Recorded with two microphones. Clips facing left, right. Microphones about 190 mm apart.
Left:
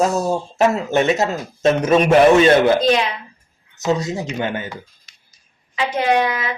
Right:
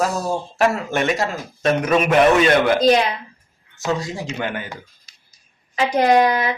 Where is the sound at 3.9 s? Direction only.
20° left (ahead or behind).